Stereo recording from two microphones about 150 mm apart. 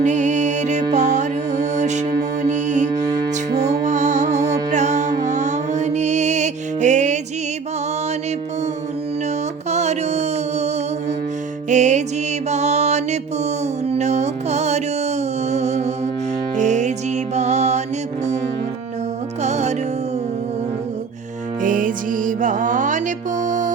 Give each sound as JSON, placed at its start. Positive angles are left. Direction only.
{"t": 0.0, "sound": "music", "side_deg": -55}
{"t": 9.6, "sound": "mantra", "side_deg": -45}
{"t": 11.7, "sound": "music", "side_deg": -50}
{"t": 19.4, "sound": "music", "side_deg": -50}
{"t": 21.6, "sound": "music", "side_deg": -65}